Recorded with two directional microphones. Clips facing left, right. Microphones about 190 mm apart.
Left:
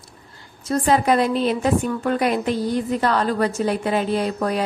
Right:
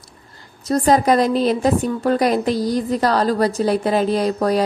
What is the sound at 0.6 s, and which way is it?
A woman's voice, 40° right (ahead or behind).